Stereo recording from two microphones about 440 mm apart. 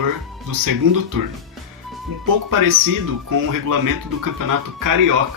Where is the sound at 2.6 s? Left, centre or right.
Right.